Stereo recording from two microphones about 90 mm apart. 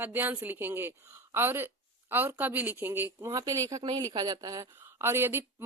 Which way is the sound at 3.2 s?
40° right (ahead or behind).